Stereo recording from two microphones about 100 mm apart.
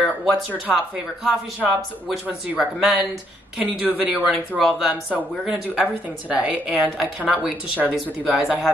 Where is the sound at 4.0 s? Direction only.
15° right (ahead or behind).